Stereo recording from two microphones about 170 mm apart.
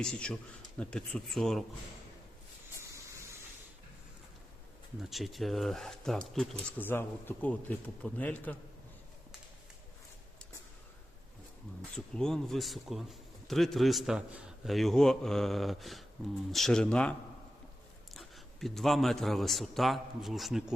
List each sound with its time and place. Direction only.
0.0 s speech: 5° left (ahead or behind)
2.7 s vehicle: 15° right (ahead or behind)
4.9 s speech: centre (ahead or behind)
11.9 s a man's voice: 5° left (ahead or behind)